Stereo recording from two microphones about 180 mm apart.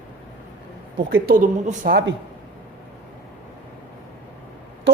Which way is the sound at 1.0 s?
55° right (ahead or behind).